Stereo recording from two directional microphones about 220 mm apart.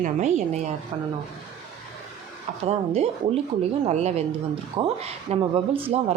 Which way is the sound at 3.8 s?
30° right (ahead or behind).